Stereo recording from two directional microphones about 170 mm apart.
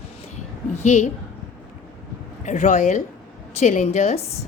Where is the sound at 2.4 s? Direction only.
45° left (ahead or behind).